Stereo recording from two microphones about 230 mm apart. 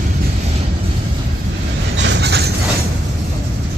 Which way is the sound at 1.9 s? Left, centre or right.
Right.